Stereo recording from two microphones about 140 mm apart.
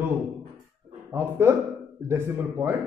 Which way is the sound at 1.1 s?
15° right (ahead or behind).